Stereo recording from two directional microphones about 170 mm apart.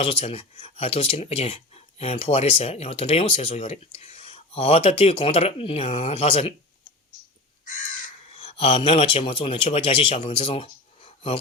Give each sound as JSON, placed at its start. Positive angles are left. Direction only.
{"t": 0.0, "sound": "speech", "side_deg": 35}
{"t": 7.6, "sound": "crow", "side_deg": 50}
{"t": 8.3, "sound": "speech", "side_deg": 35}